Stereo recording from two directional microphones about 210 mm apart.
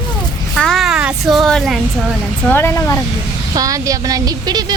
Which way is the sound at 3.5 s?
15° right (ahead or behind).